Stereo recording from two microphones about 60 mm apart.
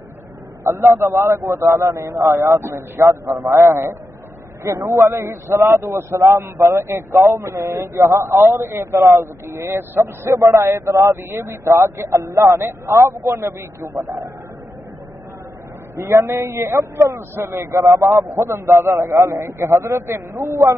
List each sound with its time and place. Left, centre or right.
0.7 s a man's voice: right
1.7 s a man's voice: right
4.6 s a man's voice: right
6.4 s a man's voice: right
8.4 s a man's voice: right
8.9 s a man's voice: right
10.3 s speech: right
11.2 s a man's voice: right
12.2 s speech: right
12.6 s a man's voice: right
16.0 s a man's voice: right
19.3 s a man's voice: right